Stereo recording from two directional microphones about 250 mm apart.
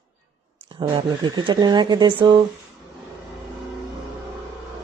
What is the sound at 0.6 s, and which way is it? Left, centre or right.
Speech, centre.